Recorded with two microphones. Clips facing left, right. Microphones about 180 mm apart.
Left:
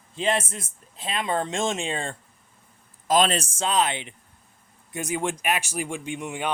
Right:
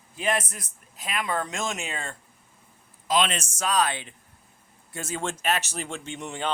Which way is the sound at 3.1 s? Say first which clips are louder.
Left 4 dB; 40° left (ahead or behind).